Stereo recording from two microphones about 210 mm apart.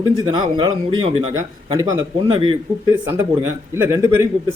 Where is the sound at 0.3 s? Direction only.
25° right (ahead or behind).